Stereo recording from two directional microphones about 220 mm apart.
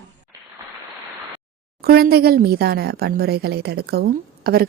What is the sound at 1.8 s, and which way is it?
Speech, 45° right (ahead or behind).